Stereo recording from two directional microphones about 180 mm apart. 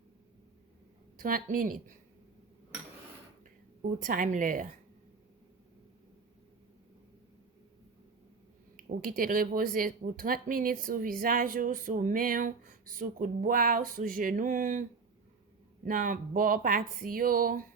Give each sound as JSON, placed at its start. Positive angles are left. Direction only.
{"t": 1.2, "sound": "speech", "side_deg": -50}
{"t": 3.8, "sound": "speech", "side_deg": -50}
{"t": 8.7, "sound": "speech", "side_deg": -50}